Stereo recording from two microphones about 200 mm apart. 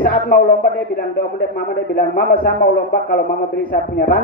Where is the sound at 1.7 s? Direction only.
50° left (ahead or behind).